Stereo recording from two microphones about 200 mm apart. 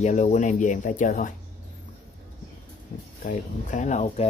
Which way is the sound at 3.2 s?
35° left (ahead or behind).